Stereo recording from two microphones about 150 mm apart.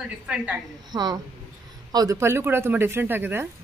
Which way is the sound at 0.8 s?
25° right (ahead or behind).